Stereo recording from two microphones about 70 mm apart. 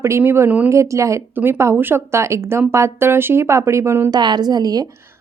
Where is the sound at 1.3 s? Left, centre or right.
Right.